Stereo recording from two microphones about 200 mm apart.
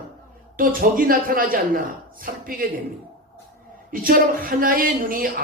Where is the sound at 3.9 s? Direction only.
45° right (ahead or behind).